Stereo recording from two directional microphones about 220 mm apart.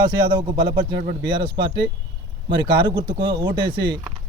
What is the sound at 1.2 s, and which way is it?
Speech, 20° right (ahead or behind).